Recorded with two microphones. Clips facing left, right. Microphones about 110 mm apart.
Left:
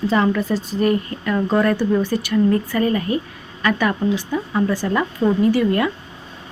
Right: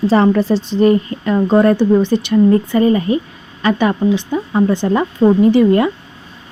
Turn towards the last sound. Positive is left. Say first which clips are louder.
# right 6 dB
turn(degrees=-25)  # may be behind; listen again after turning